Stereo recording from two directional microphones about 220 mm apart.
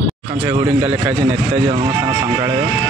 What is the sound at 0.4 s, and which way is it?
Speech, 10° right (ahead or behind).